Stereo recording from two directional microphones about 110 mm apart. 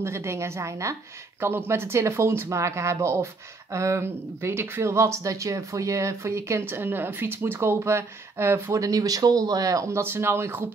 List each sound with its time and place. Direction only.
0.0 s speech: 25° right (ahead or behind)